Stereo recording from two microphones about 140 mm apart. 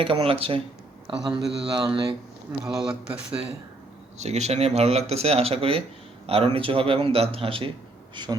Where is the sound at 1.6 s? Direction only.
30° right (ahead or behind).